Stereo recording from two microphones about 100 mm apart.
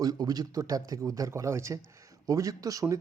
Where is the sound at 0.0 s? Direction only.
40° right (ahead or behind).